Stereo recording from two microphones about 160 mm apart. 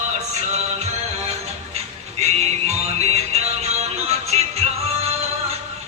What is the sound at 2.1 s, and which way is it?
Music, 40° right (ahead or behind).